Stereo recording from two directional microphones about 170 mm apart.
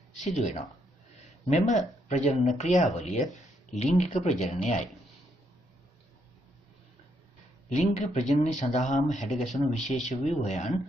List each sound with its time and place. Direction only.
0.2 s speech: 45° left (ahead or behind)
7.7 s speech: 40° left (ahead or behind)